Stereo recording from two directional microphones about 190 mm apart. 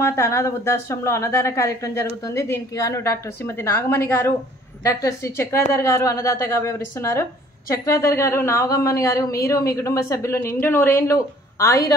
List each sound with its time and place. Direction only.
0.0 s a woman's voice: 15° left (ahead or behind)